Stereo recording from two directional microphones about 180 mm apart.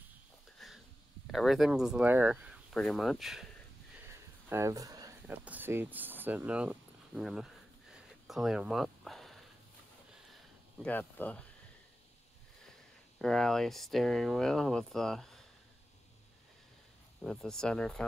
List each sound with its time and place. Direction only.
0.6 s a sound: centre (ahead or behind)
1.2 s speech: centre (ahead or behind)
3.9 s a sound: 15° right (ahead or behind)
5.2 s speech: 10° right (ahead or behind)
10.8 s speech: 10° left (ahead or behind)
13.2 s speech: centre (ahead or behind)
17.2 s speech: 5° left (ahead or behind)